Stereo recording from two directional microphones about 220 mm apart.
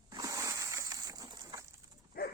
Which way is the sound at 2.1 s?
45° left (ahead or behind).